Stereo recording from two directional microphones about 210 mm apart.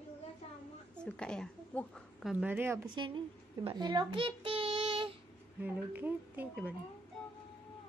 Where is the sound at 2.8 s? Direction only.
20° right (ahead or behind).